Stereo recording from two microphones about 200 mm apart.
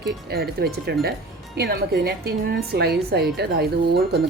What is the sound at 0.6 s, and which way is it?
A woman's voice, 55° right (ahead or behind).